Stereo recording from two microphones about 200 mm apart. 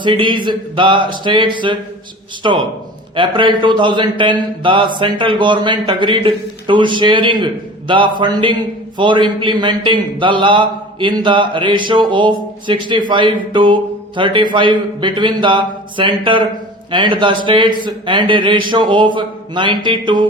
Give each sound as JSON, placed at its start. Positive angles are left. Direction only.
{"t": 0.0, "sound": "a man's voice", "side_deg": -25}